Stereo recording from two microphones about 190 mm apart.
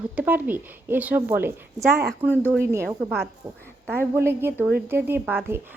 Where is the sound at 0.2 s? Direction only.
10° right (ahead or behind).